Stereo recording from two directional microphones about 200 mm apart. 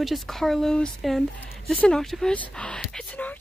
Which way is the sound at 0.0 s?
Centre (ahead or behind).